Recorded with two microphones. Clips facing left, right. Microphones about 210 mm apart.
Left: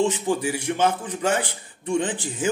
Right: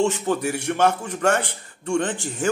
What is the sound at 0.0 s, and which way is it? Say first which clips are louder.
Speech: right 1 dB; 15° left (ahead or behind).